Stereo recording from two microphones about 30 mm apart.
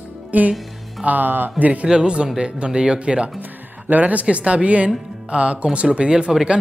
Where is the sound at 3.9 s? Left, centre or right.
Right.